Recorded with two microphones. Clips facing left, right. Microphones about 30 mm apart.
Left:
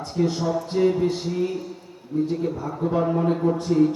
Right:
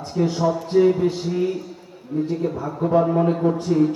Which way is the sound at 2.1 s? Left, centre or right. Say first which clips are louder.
Even; right.